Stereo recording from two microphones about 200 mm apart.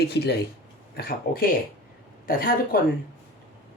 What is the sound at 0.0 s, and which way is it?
A woman's voice, 55° left (ahead or behind).